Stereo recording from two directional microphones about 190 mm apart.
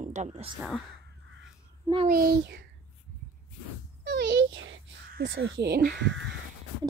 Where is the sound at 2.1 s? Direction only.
55° right (ahead or behind).